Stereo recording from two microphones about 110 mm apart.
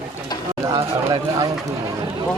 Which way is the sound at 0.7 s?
40° right (ahead or behind).